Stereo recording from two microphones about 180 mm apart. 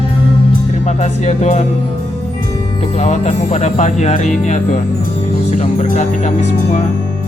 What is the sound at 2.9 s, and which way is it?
Speech, 40° left (ahead or behind).